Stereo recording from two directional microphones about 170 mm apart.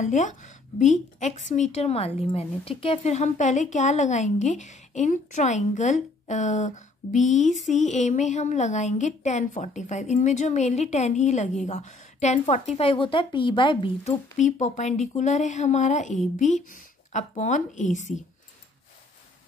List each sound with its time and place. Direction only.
0.0 s a woman's voice: 45° left (ahead or behind); by 14.1 s 30° left (ahead or behind)
14.4 s speech: 40° left (ahead or behind)